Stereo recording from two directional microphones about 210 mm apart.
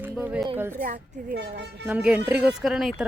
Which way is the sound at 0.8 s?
40° right (ahead or behind).